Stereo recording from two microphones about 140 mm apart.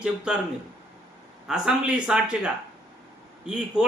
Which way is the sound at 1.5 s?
5° right (ahead or behind).